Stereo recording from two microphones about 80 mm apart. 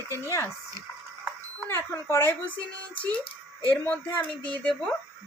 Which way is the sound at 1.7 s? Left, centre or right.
Left.